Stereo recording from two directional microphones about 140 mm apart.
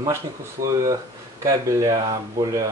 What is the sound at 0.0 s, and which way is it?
Speech, 25° right (ahead or behind).